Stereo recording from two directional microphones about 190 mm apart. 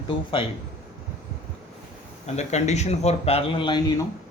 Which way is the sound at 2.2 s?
35° left (ahead or behind).